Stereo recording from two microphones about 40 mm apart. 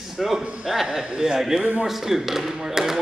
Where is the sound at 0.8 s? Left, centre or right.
Centre.